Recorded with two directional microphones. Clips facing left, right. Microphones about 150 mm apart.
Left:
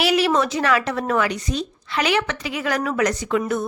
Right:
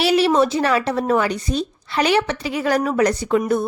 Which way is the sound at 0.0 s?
30° right (ahead or behind).